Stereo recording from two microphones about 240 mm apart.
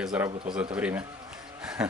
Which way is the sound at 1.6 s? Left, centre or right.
Centre.